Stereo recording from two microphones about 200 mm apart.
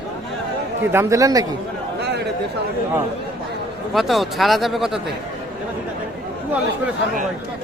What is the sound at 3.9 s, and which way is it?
Speech, centre (ahead or behind).